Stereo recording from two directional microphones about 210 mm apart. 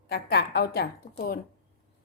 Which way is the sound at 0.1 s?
50° left (ahead or behind).